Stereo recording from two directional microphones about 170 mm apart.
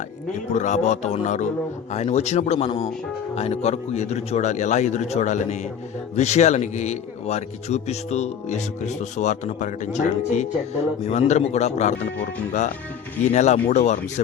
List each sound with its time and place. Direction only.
0.5 s a man's voice: 45° left (ahead or behind)
13.3 s a man's voice: 45° left (ahead or behind)